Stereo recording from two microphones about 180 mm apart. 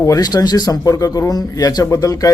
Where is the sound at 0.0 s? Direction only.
20° left (ahead or behind).